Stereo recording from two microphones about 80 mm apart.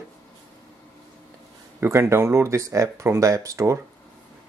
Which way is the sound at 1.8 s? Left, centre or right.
Right.